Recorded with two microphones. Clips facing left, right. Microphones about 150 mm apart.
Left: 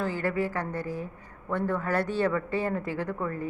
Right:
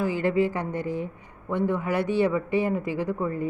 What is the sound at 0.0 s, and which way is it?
A woman's voice, 20° right (ahead or behind).